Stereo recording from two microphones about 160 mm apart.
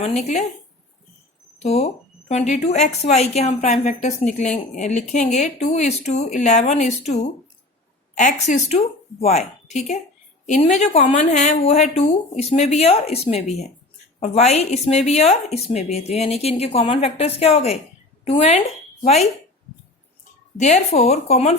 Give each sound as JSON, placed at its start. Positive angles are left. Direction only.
{"t": 0.0, "sound": "speech", "side_deg": 40}
{"t": 1.6, "sound": "a woman's voice", "side_deg": 45}
{"t": 20.6, "sound": "speech", "side_deg": 45}